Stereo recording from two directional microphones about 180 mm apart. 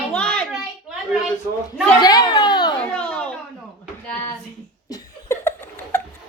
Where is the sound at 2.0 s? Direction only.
20° left (ahead or behind).